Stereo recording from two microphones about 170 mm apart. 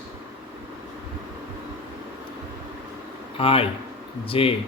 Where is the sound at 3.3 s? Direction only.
35° left (ahead or behind).